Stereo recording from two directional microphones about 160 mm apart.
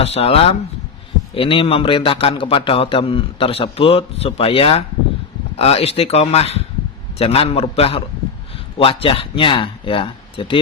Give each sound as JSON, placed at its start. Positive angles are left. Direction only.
{"t": 0.0, "sound": "a man's voice", "side_deg": 40}